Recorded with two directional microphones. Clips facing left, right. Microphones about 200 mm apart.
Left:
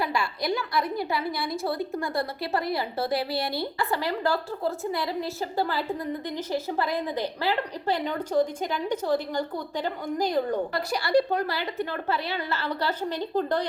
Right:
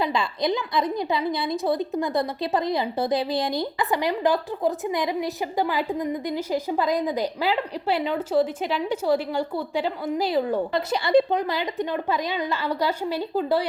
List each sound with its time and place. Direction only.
0.0 s a woman's voice: 20° right (ahead or behind)
10.8 s a woman's voice: 20° right (ahead or behind)